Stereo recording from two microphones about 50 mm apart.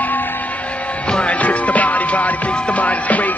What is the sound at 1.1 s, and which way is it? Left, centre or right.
Music, left.